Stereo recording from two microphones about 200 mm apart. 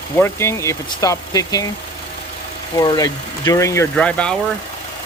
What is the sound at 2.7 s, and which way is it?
Speech, 20° left (ahead or behind).